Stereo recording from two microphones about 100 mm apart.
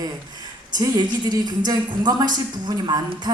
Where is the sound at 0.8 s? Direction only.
40° right (ahead or behind).